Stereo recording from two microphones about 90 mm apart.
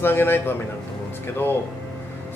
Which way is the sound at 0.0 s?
25° left (ahead or behind).